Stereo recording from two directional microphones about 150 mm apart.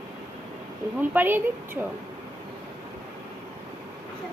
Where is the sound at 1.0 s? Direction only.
10° right (ahead or behind).